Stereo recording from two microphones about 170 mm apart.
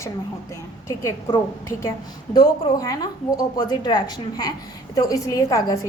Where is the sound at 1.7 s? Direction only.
20° left (ahead or behind).